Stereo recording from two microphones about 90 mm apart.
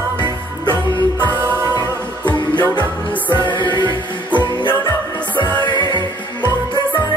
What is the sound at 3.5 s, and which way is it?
Music, 60° left (ahead or behind).